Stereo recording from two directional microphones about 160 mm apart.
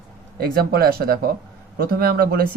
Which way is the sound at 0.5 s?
70° right (ahead or behind).